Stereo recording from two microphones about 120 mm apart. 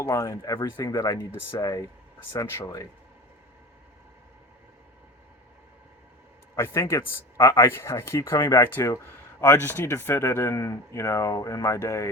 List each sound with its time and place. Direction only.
0.1 s a man's voice: 25° left (ahead or behind)
6.6 s a man's voice: 25° left (ahead or behind)